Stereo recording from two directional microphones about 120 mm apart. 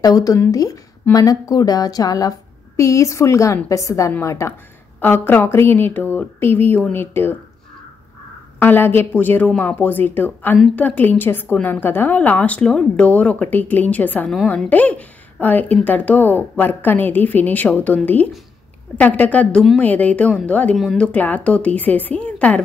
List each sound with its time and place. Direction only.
0.0 s a woman's voice: 30° left (ahead or behind)
8.5 s a woman's voice: 15° left (ahead or behind)
20.7 s speech: centre (ahead or behind)
21.1 s a woman's voice: 15° left (ahead or behind)